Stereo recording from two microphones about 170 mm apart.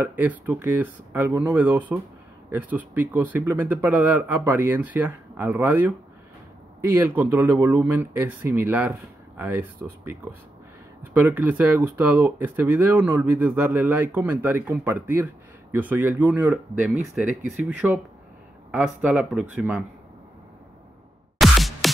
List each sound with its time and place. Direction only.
0.0 s speech: 10° right (ahead or behind)
7.0 s speech: 15° right (ahead or behind)
11.1 s speech: 10° right (ahead or behind)
21.4 s music: centre (ahead or behind)